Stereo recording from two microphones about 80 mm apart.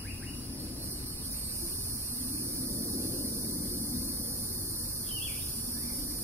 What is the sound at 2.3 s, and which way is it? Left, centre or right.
Hum, right.